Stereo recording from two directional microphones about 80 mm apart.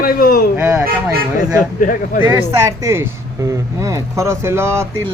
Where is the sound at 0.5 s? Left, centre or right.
Right.